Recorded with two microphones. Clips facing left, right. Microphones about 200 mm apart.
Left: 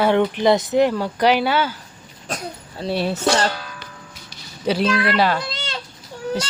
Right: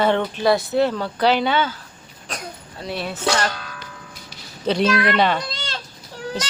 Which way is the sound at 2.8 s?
30° left (ahead or behind).